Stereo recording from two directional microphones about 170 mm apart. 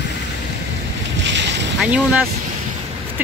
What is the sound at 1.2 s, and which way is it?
Boat, 90° right.